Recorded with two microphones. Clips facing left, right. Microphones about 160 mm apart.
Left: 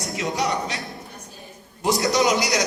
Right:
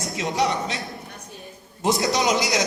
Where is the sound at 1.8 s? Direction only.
20° right (ahead or behind).